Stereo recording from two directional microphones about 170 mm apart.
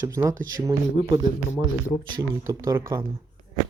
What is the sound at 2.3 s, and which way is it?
Speech, 15° right (ahead or behind).